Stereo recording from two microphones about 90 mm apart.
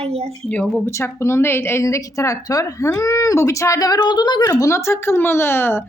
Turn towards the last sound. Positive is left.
turn(degrees=25)  # may be behind; listen again after turning